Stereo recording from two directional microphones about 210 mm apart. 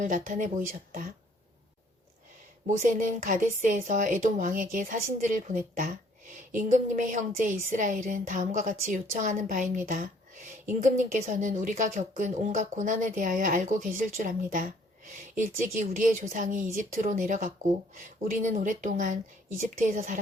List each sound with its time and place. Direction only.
0.0 s a woman's voice: 40° right (ahead or behind)
2.6 s a woman's voice: 40° right (ahead or behind)